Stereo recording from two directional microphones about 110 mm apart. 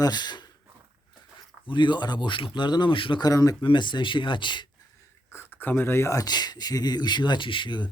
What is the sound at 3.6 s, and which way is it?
Speech, 45° left (ahead or behind).